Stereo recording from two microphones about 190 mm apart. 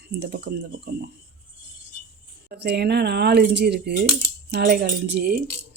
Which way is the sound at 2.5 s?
60° right (ahead or behind).